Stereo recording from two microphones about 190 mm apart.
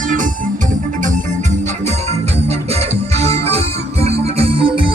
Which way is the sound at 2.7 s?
35° right (ahead or behind).